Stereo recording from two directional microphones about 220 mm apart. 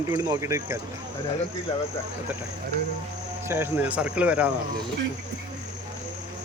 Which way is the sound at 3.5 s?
10° right (ahead or behind).